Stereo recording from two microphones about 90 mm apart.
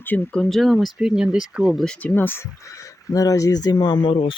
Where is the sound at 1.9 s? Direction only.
15° left (ahead or behind).